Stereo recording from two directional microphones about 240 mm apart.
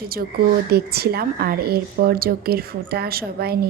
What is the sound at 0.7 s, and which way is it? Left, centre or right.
A woman's voice, right.